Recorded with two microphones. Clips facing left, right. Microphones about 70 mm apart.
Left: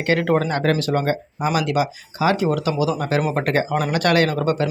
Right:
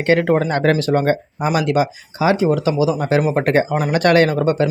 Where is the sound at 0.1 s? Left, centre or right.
Right.